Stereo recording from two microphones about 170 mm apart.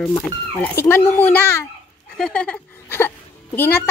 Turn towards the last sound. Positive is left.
turn(degrees=15)  # may be behind; listen again after turning